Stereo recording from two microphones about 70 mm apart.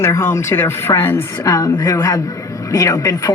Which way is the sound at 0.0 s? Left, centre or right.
Left.